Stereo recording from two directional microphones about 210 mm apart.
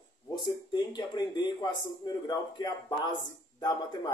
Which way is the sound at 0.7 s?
20° left (ahead or behind).